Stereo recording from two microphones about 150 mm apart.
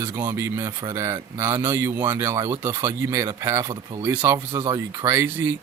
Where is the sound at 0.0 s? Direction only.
15° right (ahead or behind).